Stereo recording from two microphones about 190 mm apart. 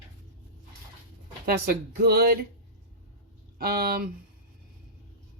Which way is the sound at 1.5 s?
55° right (ahead or behind).